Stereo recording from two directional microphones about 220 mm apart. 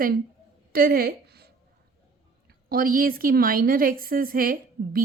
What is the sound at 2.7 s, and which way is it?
A woman's voice, 40° right (ahead or behind).